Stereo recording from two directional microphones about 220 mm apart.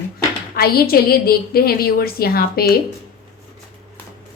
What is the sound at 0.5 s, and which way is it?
A woman's voice, 45° left (ahead or behind).